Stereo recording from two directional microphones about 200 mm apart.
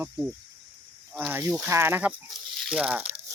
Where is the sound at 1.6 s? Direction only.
10° right (ahead or behind).